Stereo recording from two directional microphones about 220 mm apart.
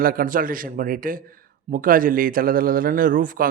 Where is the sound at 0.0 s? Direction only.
40° right (ahead or behind).